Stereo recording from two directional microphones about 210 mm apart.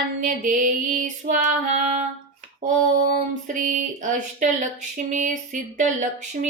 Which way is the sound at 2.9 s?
40° right (ahead or behind).